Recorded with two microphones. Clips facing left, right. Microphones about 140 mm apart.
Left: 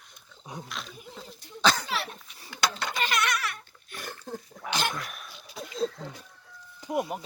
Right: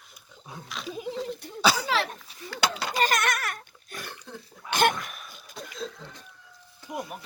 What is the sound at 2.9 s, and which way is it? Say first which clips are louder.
Pig: right 3 dB; 45° right (ahead or behind).